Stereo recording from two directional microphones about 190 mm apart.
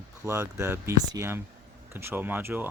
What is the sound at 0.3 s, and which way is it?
Speech, 15° right (ahead or behind).